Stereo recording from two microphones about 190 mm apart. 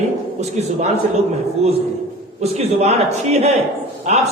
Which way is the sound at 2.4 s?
35° right (ahead or behind).